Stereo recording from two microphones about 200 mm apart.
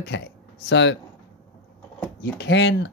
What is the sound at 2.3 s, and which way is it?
Speech, 60° left (ahead or behind).